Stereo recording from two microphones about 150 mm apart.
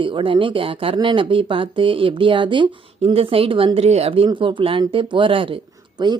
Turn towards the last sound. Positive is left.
turn(degrees=-25)  # may be behind; listen again after turning